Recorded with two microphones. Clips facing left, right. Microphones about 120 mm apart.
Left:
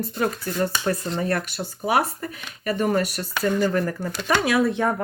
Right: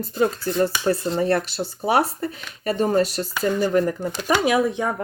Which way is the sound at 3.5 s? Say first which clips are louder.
Right 2 dB; 15° right (ahead or behind).